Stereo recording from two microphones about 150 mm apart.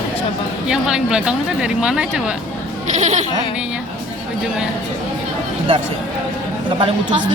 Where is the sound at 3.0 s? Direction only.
50° right (ahead or behind).